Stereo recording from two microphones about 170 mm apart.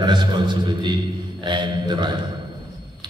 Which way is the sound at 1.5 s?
25° right (ahead or behind).